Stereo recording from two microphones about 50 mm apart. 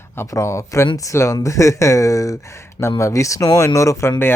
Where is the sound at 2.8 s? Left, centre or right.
Left.